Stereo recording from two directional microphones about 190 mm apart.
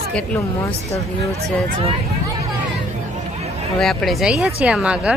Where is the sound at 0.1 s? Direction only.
5° left (ahead or behind).